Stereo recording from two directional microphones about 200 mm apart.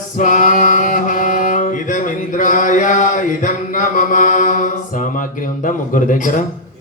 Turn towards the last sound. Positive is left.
turn(degrees=40)  # may be behind; listen again after turning